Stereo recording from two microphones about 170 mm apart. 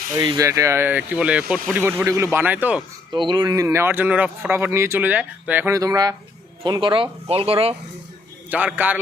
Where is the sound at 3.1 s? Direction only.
25° right (ahead or behind).